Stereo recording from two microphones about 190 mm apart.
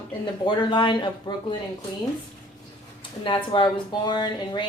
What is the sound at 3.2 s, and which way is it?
A woman's voice, 25° left (ahead or behind).